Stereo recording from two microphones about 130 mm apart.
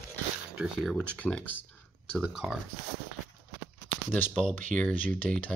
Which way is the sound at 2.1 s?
5° right (ahead or behind).